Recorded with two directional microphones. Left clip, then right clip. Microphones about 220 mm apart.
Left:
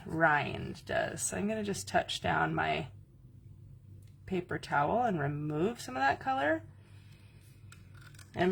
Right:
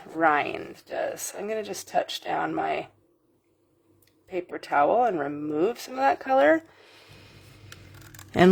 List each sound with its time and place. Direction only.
0.2 s speech: 30° right (ahead or behind)
4.3 s speech: 25° right (ahead or behind)